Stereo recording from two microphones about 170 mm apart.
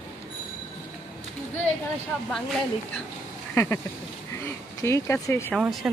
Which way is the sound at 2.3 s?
5° left (ahead or behind).